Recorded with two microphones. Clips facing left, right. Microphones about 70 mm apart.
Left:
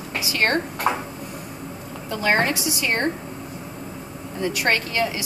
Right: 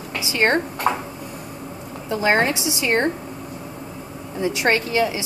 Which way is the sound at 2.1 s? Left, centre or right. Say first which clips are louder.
Right 2 dB; centre.